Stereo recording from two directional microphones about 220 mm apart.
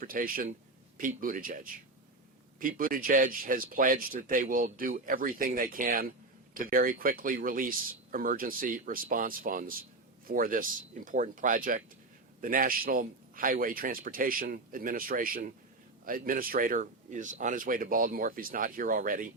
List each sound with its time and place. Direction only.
0.0 s speech: 40° right (ahead or behind)